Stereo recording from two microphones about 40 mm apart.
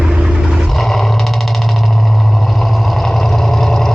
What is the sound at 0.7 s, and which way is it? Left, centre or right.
Roar, centre.